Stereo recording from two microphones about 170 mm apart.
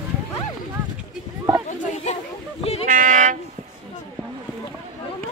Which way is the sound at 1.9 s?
45° left (ahead or behind).